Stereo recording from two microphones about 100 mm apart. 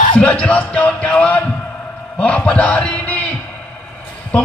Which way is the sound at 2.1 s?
15° left (ahead or behind).